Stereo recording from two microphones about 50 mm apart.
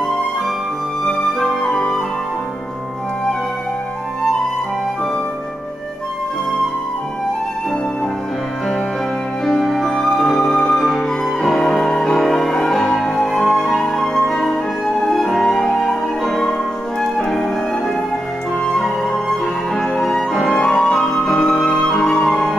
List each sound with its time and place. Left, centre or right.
1.0 s music: centre
1.7 s flute: centre
9.4 s music: centre
13.8 s flute: centre
17.0 s music: centre
18.6 s music: centre